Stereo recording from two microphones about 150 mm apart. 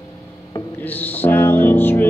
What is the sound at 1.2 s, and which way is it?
Music, 15° left (ahead or behind).